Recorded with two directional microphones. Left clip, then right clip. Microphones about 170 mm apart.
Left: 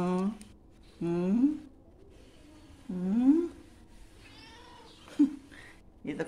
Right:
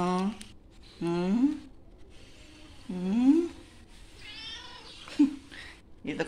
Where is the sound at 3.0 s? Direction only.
10° left (ahead or behind).